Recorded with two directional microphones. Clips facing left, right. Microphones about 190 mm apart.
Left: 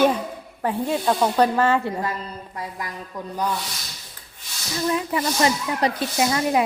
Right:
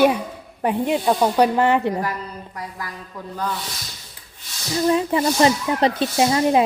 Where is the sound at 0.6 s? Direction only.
20° right (ahead or behind).